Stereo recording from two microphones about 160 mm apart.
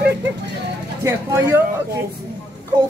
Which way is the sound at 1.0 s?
20° right (ahead or behind).